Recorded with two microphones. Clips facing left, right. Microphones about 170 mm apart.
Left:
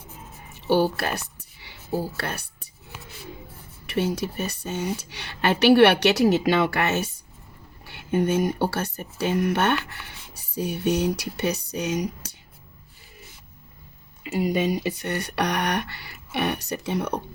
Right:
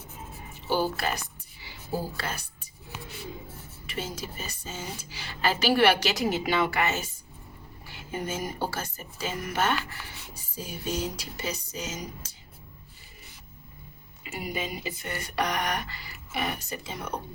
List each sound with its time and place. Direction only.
0.7 s a woman's voice: 65° left (ahead or behind)
3.8 s speech: 70° left (ahead or behind)
14.3 s speech: 70° left (ahead or behind)